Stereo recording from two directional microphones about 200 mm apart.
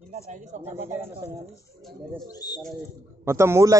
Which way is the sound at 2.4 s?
20° left (ahead or behind).